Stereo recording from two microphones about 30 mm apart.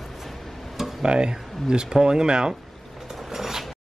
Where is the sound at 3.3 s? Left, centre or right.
Centre.